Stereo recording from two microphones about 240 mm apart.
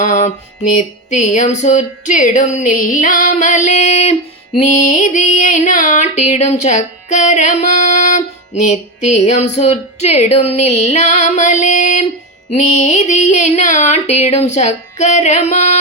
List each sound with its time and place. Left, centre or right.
0.0 s music: left